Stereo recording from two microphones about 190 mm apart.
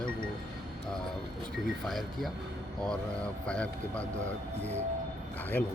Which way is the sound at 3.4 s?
5° left (ahead or behind).